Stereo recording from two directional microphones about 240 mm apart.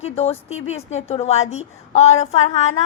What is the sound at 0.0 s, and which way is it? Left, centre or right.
A woman's voice, left.